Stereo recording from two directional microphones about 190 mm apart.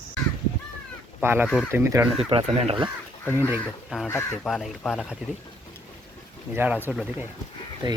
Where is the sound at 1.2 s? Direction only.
10° right (ahead or behind).